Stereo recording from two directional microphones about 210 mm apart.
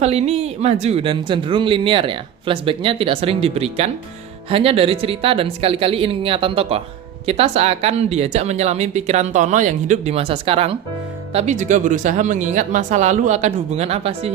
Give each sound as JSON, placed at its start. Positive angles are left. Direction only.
{"t": 0.0, "sound": "speech", "side_deg": -30}